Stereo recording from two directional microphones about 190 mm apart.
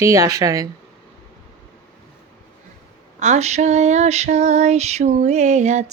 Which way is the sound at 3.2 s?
35° right (ahead or behind).